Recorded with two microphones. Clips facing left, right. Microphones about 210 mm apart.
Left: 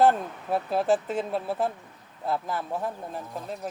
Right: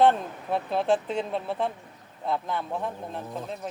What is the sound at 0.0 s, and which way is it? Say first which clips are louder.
Speech: even; 5° left (ahead or behind).